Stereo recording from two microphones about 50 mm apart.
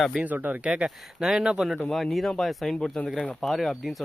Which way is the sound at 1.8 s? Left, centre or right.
Centre.